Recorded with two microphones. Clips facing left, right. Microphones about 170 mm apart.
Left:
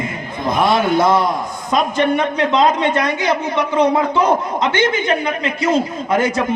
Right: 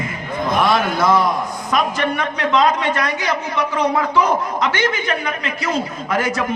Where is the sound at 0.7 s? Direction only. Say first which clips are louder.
Left 2 dB; 25° left (ahead or behind).